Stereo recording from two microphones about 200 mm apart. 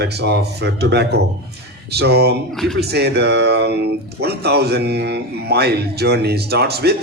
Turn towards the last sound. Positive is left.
turn(degrees=-55)  # may be behind; listen again after turning